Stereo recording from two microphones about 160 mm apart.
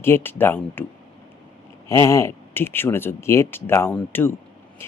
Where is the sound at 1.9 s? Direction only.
20° left (ahead or behind).